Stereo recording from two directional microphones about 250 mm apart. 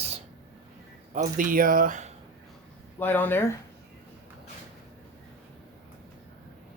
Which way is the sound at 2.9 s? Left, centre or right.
Centre.